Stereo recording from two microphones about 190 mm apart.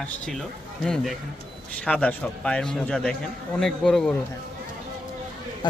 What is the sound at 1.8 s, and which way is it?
A man's voice, 5° left (ahead or behind).